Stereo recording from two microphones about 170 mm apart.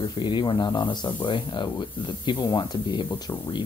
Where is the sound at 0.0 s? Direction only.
30° left (ahead or behind).